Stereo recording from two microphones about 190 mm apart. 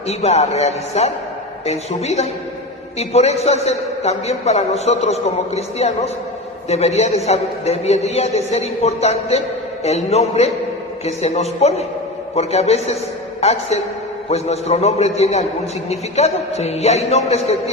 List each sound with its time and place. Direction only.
0.1 s a man's voice: 35° left (ahead or behind)